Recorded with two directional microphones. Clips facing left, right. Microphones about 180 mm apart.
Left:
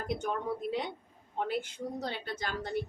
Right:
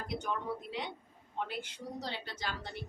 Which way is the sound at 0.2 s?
50° left (ahead or behind).